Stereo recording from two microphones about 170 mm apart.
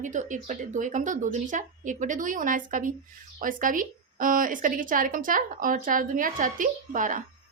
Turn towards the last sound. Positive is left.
turn(degrees=-50)  # may be behind; listen again after turning